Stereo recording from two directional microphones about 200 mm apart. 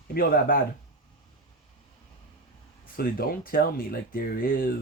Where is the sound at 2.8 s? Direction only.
45° left (ahead or behind).